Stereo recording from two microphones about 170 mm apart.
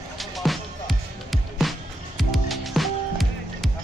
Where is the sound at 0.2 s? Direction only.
Centre (ahead or behind).